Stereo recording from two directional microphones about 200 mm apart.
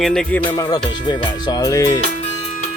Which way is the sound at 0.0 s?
5° left (ahead or behind).